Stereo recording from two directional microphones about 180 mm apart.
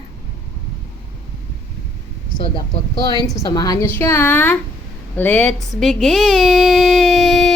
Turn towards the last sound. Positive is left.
turn(degrees=0)  # may be behind; listen again after turning